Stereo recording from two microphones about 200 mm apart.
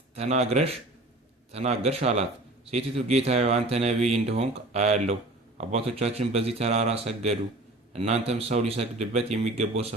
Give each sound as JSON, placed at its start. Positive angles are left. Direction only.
{"t": 0.2, "sound": "speech", "side_deg": -35}